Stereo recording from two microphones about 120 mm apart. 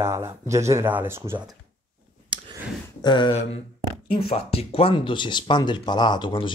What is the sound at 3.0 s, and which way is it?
Speech, 40° left (ahead or behind).